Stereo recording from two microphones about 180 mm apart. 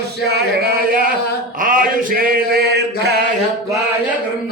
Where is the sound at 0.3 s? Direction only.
60° right (ahead or behind).